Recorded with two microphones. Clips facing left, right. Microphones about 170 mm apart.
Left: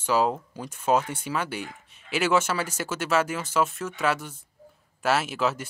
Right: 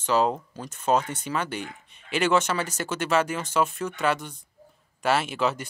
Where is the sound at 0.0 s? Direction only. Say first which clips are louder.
Right 1 dB; 10° left (ahead or behind).